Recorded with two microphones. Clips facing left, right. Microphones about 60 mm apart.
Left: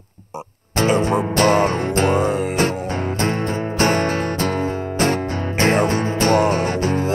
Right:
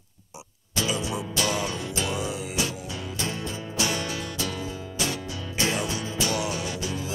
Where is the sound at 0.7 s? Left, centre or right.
Left.